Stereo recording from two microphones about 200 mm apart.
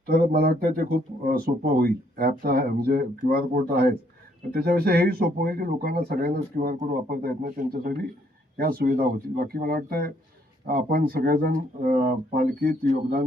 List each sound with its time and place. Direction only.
0.0 s speech: 45° right (ahead or behind)